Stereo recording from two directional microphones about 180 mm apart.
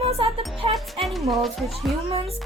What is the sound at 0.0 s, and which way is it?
Music, 35° right (ahead or behind).